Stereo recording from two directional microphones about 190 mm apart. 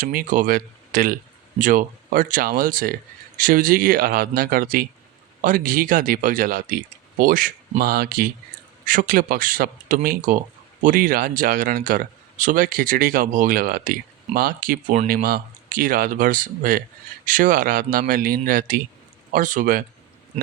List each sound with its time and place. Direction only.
0.0 s speech: 50° right (ahead or behind)